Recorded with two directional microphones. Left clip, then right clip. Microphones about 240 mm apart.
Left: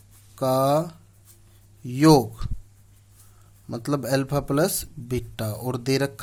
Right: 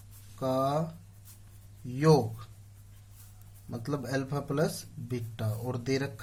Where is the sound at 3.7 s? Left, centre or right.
Left.